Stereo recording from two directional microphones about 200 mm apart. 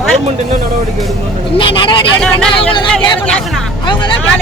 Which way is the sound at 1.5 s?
25° left (ahead or behind).